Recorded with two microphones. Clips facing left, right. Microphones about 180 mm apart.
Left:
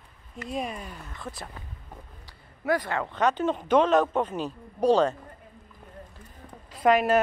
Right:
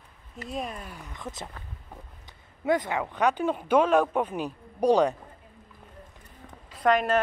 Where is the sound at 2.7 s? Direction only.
20° right (ahead or behind).